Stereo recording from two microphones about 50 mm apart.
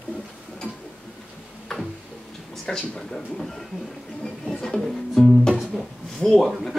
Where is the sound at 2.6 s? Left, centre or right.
Centre.